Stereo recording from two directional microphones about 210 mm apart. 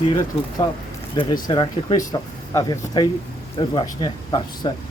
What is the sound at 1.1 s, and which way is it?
Speech, 20° left (ahead or behind).